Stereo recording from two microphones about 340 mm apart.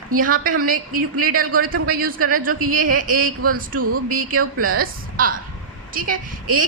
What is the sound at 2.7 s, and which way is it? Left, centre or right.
A woman's voice, right.